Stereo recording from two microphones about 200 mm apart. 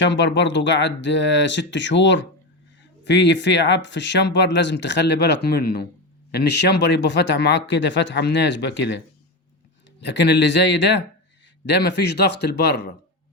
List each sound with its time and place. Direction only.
0.0 s speech: 60° left (ahead or behind)
10.0 s speech: 60° left (ahead or behind)